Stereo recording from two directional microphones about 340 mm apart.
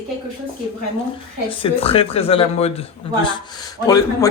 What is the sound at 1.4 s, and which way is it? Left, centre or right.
A man's voice, centre.